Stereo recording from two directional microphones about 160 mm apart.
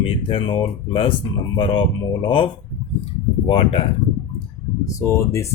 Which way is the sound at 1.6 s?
30° left (ahead or behind).